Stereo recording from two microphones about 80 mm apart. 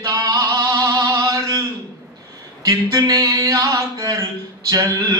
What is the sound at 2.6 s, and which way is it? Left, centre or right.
A man's voice, right.